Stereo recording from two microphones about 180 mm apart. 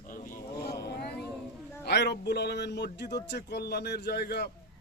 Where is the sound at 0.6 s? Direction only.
65° left (ahead or behind).